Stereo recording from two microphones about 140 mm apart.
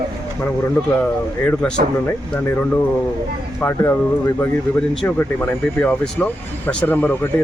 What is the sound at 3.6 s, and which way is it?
Speech, 20° left (ahead or behind).